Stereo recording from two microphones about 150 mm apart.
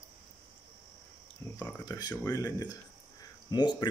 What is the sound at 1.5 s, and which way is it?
Speech, 15° left (ahead or behind).